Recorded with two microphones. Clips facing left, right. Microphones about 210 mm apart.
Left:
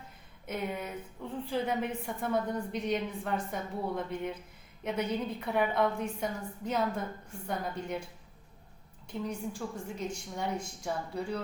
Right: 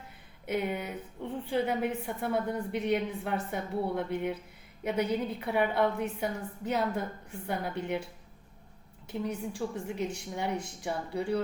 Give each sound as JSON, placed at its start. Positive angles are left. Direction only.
{"t": 0.5, "sound": "a woman's voice", "side_deg": -5}
{"t": 9.0, "sound": "a woman's voice", "side_deg": -10}